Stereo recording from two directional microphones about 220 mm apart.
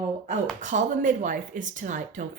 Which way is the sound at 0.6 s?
35° right (ahead or behind).